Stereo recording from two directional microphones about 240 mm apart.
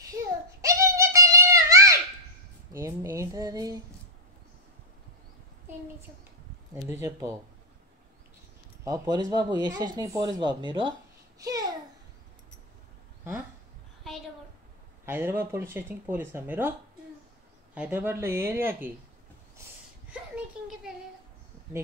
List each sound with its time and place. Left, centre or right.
0.6 s a sound: centre
6.9 s speech: centre
8.8 s a child's voice: centre
15.0 s speech: centre
17.7 s speech: centre
20.1 s a sound: centre